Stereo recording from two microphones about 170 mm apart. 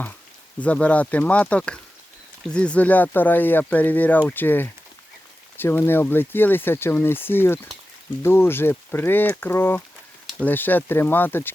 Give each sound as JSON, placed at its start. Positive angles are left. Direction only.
{"t": 0.6, "sound": "speech", "side_deg": 10}